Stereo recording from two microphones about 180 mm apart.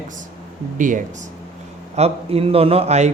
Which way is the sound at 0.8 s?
45° right (ahead or behind).